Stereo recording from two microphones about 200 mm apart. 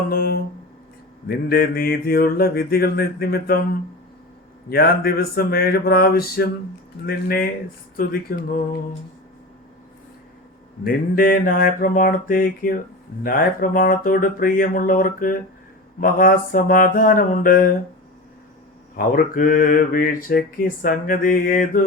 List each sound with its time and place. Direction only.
0.1 s mantra: 50° left (ahead or behind)
1.5 s mantra: 50° left (ahead or behind)
4.7 s mantra: 50° left (ahead or behind)
10.8 s mantra: 45° left (ahead or behind)
18.9 s mantra: 45° left (ahead or behind)